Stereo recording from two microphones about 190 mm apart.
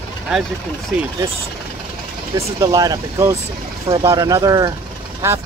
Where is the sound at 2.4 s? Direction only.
15° right (ahead or behind).